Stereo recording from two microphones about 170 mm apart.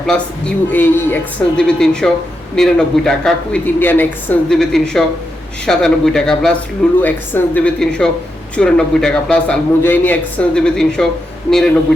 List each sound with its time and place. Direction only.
0.1 s a woman's voice: 10° left (ahead or behind)